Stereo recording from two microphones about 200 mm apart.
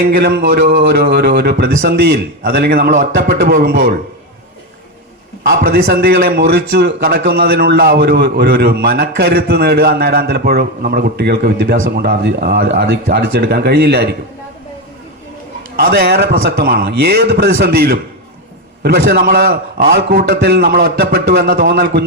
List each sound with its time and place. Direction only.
0.0 s a man's voice: 50° right (ahead or behind)
5.4 s a man's voice: 45° right (ahead or behind)
15.7 s a man's voice: 50° right (ahead or behind)